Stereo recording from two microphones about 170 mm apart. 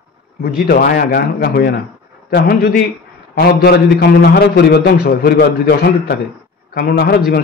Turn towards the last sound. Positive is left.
turn(degrees=65)  # may be behind; listen again after turning